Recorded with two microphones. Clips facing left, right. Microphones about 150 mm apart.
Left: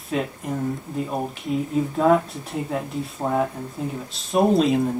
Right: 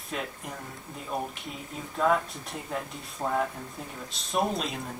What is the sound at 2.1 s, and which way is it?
Speech, centre (ahead or behind).